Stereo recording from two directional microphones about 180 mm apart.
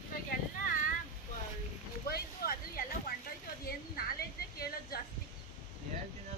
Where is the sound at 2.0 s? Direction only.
60° left (ahead or behind).